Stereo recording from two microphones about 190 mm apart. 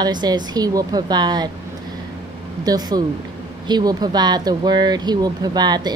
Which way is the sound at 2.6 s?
20° right (ahead or behind).